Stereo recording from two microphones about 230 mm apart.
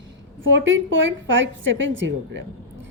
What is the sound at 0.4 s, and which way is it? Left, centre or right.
A woman's voice, right.